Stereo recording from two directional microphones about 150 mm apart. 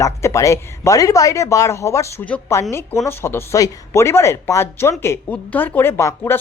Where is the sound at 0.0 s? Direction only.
20° left (ahead or behind).